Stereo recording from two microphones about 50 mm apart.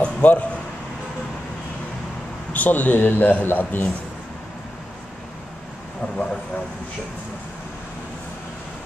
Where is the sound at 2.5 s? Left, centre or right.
Left.